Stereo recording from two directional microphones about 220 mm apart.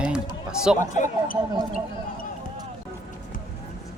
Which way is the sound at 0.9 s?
35° left (ahead or behind).